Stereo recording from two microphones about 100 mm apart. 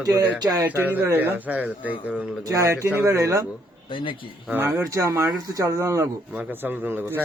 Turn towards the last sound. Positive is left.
turn(degrees=-20)  # may be behind; listen again after turning